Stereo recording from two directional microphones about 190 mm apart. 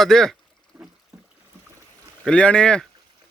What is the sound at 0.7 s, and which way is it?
Rowboat, 10° right (ahead or behind).